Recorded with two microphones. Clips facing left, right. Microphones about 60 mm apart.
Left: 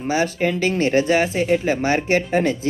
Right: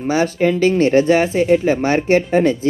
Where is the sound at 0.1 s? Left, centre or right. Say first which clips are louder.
Right 4 dB; right.